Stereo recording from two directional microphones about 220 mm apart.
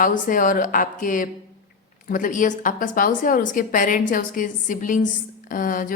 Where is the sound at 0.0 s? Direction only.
40° left (ahead or behind).